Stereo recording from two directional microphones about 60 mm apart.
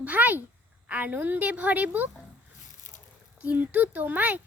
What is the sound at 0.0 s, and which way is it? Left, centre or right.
A child's voice, right.